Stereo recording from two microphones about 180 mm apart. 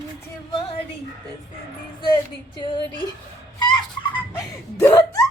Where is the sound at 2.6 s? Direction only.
25° left (ahead or behind).